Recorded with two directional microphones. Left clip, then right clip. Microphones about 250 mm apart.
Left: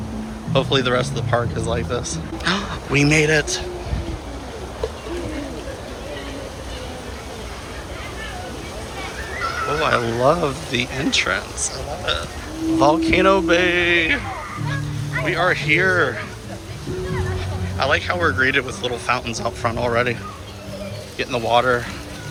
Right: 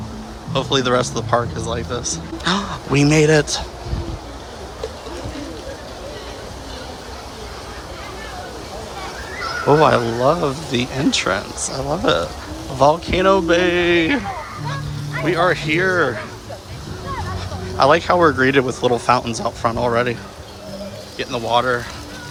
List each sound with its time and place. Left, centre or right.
0.5 s a man's voice: centre
9.6 s speech: right
12.8 s a man's voice: centre
15.2 s a man's voice: centre
17.7 s speech: right
21.2 s a man's voice: centre